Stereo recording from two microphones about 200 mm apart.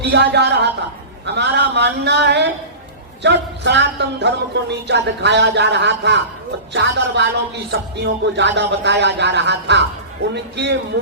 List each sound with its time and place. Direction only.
0.0 s speech: 60° right (ahead or behind)